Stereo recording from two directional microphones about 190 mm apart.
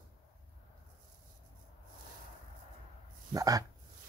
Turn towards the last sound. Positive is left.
turn(degrees=-20)  # may be behind; listen again after turning